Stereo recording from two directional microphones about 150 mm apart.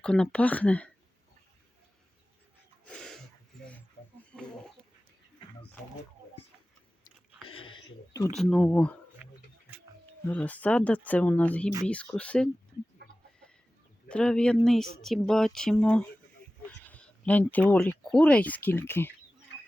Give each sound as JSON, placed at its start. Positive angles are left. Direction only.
{"t": 0.0, "sound": "speech", "side_deg": 5}
{"t": 2.8, "sound": "a sound", "side_deg": 5}
{"t": 7.4, "sound": "a sound", "side_deg": 35}
{"t": 8.3, "sound": "speech", "side_deg": 5}
{"t": 9.2, "sound": "wild animals", "side_deg": -5}
{"t": 10.2, "sound": "speech", "side_deg": 10}
{"t": 14.1, "sound": "speech", "side_deg": 5}